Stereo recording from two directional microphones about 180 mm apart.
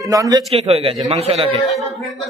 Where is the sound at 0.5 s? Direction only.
35° right (ahead or behind).